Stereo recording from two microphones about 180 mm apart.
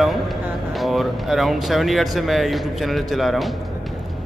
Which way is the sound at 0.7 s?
Centre (ahead or behind).